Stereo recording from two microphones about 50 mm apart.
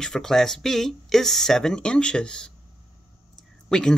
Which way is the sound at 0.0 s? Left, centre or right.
Centre.